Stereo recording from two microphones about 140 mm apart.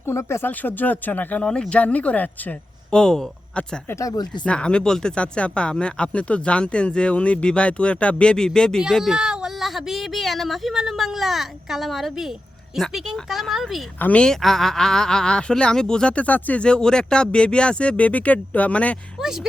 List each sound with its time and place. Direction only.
0.0 s speech: 20° left (ahead or behind)
3.9 s speech: 25° left (ahead or behind)
4.4 s speech: 5° left (ahead or behind)
19.2 s speech: 5° right (ahead or behind)